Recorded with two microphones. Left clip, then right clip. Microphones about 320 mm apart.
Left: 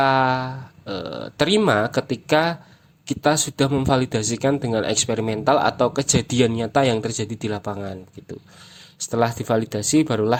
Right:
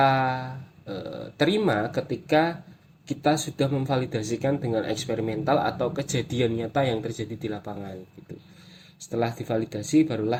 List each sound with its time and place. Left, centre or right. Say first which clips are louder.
0.0 s a sound: left 4 dB; left
2.3 s a man's voice: left 3 dB; left
9.0 s a man's voice: left 7 dB; left